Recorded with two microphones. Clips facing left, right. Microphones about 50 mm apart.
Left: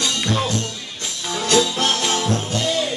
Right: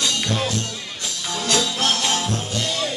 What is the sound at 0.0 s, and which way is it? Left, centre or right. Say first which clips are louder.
Music: left 1 dB; centre.